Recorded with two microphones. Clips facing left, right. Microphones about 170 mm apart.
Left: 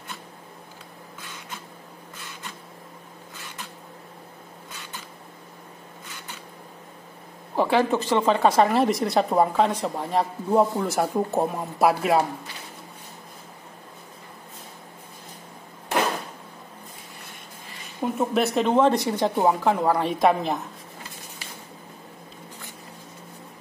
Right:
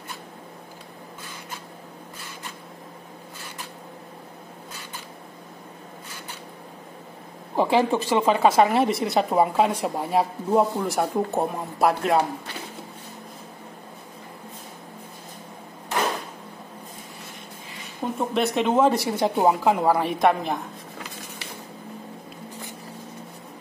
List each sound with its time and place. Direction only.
7.5 s speech: 15° right (ahead or behind); by 12.3 s 5° left (ahead or behind)
18.3 s speech: centre (ahead or behind)